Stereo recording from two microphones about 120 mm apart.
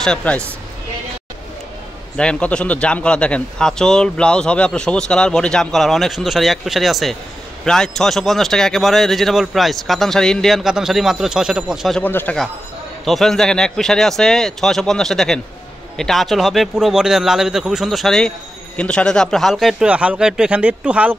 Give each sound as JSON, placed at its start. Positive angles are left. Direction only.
{"t": 0.0, "sound": "a man's voice", "side_deg": 5}
{"t": 2.1, "sound": "a man's voice", "side_deg": 10}
{"t": 12.0, "sound": "a man's voice", "side_deg": 15}
{"t": 13.0, "sound": "speech", "side_deg": 0}